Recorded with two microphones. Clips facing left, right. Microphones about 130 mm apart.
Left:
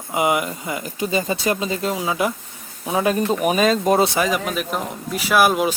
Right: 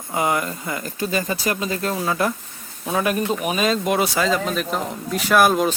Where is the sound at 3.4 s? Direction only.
40° left (ahead or behind).